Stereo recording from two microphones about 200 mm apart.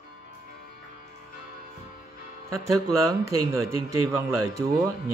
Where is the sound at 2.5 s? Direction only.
15° right (ahead or behind).